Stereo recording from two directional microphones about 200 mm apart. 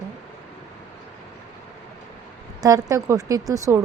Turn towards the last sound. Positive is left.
turn(degrees=-15)  # may be behind; listen again after turning